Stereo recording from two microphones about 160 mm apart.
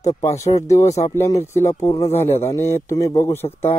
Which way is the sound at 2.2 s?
40° left (ahead or behind).